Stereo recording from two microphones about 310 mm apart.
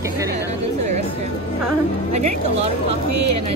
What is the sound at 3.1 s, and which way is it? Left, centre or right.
Speech, right.